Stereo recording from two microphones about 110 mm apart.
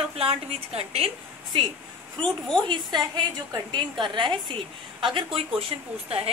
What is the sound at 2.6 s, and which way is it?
A woman's voice, 45° right (ahead or behind).